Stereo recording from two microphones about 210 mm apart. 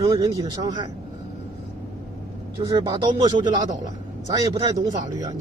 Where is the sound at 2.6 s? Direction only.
20° right (ahead or behind).